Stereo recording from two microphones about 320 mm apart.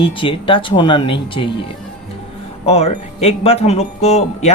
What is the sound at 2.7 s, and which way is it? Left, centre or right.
Speech, centre.